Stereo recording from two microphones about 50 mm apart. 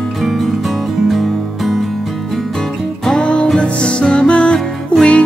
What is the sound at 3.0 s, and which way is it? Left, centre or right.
Music, centre.